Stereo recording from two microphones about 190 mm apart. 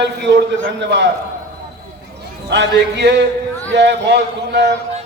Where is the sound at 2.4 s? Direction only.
65° right (ahead or behind).